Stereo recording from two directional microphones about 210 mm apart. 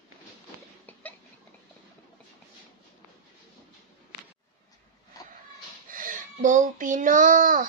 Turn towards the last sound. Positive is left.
turn(degrees=-40)  # may be behind; listen again after turning